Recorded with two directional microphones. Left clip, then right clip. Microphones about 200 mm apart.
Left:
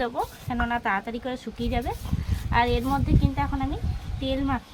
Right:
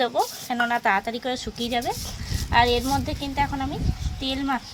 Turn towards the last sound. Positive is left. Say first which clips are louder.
# right 1 dB
turn(degrees=-30)  # may be behind; listen again after turning